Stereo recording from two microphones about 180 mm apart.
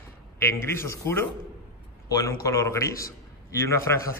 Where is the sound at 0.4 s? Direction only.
15° left (ahead or behind).